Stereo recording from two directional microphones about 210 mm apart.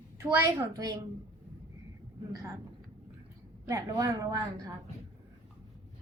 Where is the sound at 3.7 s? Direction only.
15° right (ahead or behind).